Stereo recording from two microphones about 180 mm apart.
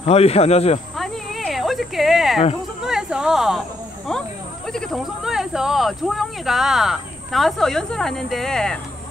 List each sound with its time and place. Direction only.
0.0 s speech: 35° left (ahead or behind)
0.9 s a sound: centre (ahead or behind)
4.7 s speech: centre (ahead or behind)